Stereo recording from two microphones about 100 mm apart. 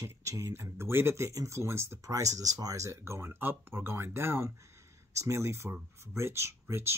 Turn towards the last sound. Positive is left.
turn(degrees=-25)  # may be behind; listen again after turning